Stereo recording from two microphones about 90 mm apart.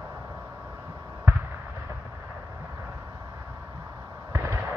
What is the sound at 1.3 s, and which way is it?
Fireworks, 30° right (ahead or behind).